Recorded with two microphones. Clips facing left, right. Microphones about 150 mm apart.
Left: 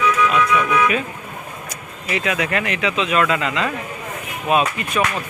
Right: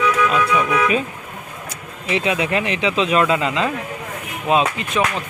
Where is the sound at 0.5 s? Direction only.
30° right (ahead or behind).